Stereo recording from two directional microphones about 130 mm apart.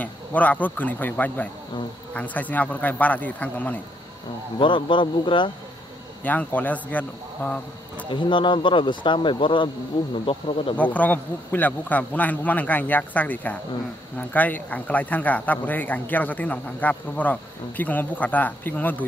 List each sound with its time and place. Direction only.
0.0 s speech: 10° left (ahead or behind)
4.6 s speech: 40° left (ahead or behind)
6.2 s speech: 10° left (ahead or behind)
8.1 s speech: 40° left (ahead or behind)
10.8 s speech: 10° left (ahead or behind)